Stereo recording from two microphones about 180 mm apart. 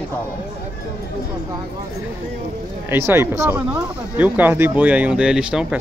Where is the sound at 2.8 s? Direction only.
15° right (ahead or behind).